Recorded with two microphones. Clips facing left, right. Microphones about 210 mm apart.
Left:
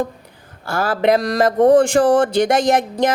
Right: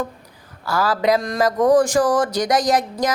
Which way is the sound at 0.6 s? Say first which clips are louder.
Left 2 dB; 25° left (ahead or behind).